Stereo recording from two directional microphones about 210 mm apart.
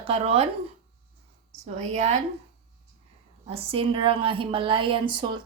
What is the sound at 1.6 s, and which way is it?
Speech, 30° right (ahead or behind).